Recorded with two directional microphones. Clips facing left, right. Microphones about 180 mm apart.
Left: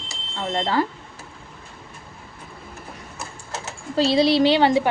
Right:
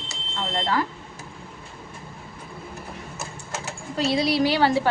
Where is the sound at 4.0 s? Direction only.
30° left (ahead or behind).